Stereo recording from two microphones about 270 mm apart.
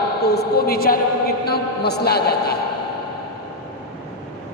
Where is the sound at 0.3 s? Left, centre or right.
Left.